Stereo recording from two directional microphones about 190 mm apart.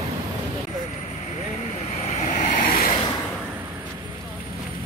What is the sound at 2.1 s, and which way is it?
Vehicle, 40° left (ahead or behind).